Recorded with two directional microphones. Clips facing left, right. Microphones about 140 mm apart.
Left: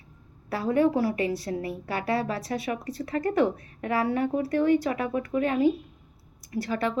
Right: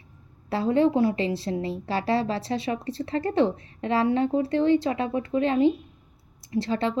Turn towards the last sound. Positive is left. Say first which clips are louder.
# right 2 dB
turn(degrees=-25)  # may be behind; listen again after turning